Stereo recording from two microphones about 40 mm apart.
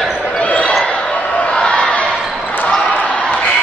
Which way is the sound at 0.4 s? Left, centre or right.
Left.